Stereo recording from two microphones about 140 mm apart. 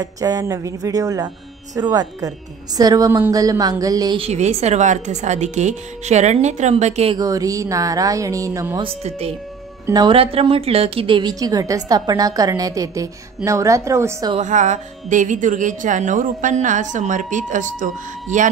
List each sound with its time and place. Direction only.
0.0 s a woman's voice: 25° right (ahead or behind)
4.2 s speech: 50° right (ahead or behind)
7.2 s a woman's voice: 25° right (ahead or behind)
8.8 s a woman's voice: 45° right (ahead or behind); by 14.3 s 20° right (ahead or behind)
14.4 s speech: 60° right (ahead or behind)